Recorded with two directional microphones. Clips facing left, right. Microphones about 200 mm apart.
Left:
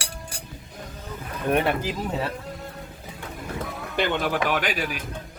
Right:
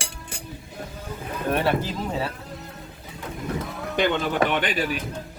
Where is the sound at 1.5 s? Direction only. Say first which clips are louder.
Left 1 dB; 15° left (ahead or behind).